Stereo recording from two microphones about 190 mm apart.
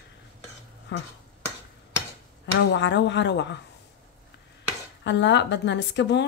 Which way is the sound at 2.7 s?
70° left (ahead or behind).